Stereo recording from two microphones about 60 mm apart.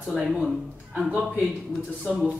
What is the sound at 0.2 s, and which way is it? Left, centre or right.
Speech, centre.